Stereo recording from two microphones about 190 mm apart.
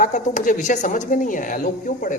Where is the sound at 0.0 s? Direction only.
40° left (ahead or behind).